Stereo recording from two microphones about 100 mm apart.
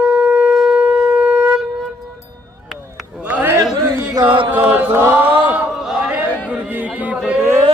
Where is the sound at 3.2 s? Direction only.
15° right (ahead or behind).